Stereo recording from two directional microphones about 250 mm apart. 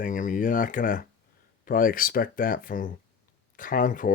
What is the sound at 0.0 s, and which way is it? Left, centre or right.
Speech, left.